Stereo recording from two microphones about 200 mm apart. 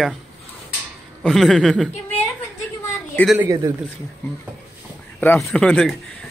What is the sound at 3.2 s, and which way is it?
Speech, 10° left (ahead or behind).